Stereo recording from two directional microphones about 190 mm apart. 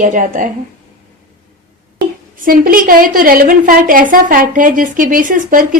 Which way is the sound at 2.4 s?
50° right (ahead or behind).